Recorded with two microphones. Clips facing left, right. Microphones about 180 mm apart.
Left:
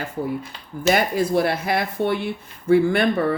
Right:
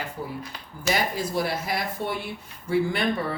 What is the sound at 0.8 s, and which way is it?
Speech, 60° left (ahead or behind).